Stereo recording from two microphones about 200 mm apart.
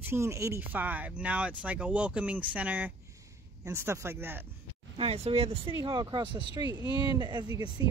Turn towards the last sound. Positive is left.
turn(degrees=-15)  # may be behind; listen again after turning